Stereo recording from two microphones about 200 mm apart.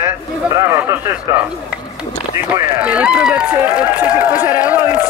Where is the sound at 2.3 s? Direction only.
10° right (ahead or behind).